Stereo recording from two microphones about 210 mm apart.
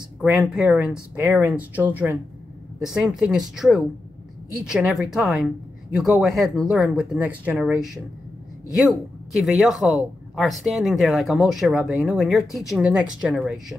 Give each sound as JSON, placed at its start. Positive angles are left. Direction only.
{"t": 0.2, "sound": "speech", "side_deg": -5}